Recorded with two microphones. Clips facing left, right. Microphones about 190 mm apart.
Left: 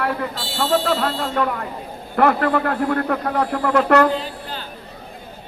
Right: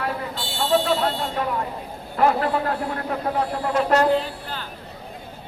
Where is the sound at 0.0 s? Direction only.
60° left (ahead or behind).